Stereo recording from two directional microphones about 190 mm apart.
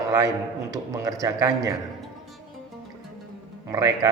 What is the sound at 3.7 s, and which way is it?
Speech, 20° right (ahead or behind).